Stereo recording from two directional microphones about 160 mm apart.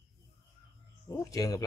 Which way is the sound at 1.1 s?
20° left (ahead or behind).